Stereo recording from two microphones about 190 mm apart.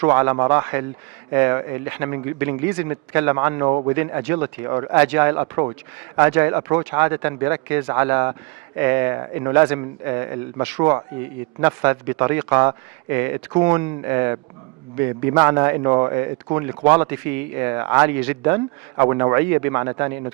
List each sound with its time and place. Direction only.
0.0 s speech: 15° right (ahead or behind)